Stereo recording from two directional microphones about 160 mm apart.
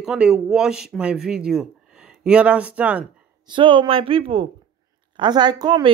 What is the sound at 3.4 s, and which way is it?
A woman's voice, 30° right (ahead or behind).